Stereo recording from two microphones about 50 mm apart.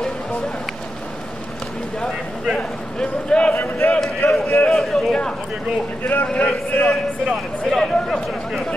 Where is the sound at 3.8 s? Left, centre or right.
Left.